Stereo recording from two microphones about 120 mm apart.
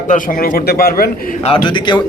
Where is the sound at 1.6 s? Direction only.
40° left (ahead or behind).